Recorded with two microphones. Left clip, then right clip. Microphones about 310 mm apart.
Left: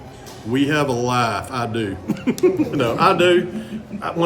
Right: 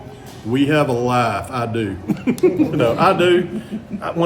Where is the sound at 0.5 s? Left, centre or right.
Centre.